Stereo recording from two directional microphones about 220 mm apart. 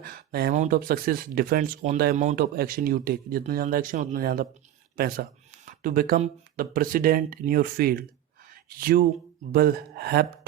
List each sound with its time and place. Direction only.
0.0 s speech: 45° right (ahead or behind)